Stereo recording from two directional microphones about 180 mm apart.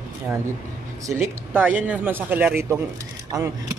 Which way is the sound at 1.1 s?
10° right (ahead or behind).